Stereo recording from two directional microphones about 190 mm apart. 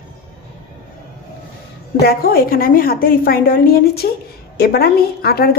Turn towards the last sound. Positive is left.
turn(degrees=55)  # may be behind; listen again after turning